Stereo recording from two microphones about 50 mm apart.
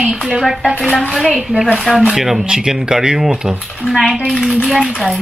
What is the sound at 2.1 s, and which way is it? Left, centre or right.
Speech, centre.